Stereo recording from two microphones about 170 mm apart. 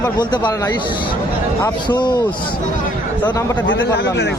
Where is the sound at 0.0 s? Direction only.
25° left (ahead or behind).